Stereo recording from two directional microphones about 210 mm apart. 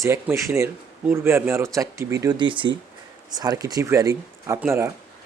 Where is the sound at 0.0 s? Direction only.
15° right (ahead or behind).